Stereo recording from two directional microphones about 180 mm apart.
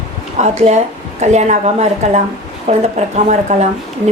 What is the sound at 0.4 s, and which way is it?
A woman's voice, 40° right (ahead or behind).